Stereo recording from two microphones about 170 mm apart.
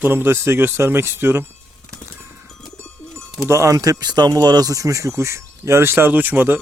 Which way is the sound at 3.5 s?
20° right (ahead or behind).